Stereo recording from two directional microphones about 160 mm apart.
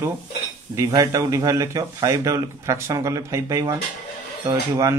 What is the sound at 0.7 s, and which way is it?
Speech, 20° right (ahead or behind).